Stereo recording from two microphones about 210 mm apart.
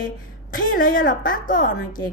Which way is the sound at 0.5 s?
40° left (ahead or behind).